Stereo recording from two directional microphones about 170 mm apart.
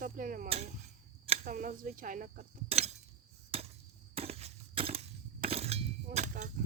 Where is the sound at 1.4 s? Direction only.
55° right (ahead or behind).